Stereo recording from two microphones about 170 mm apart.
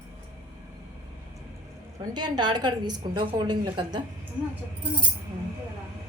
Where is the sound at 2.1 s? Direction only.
25° right (ahead or behind).